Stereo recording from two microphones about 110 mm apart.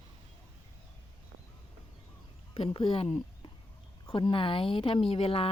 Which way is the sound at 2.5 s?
55° left (ahead or behind).